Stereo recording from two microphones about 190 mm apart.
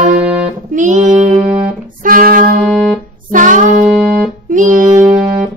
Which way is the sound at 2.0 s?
50° right (ahead or behind).